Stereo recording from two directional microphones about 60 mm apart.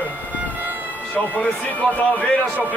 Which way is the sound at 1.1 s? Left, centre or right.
Left.